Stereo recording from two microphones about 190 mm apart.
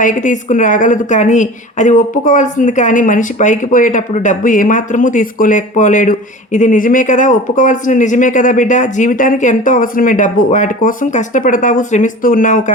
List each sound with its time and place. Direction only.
0.0 s a woman's voice: 40° left (ahead or behind)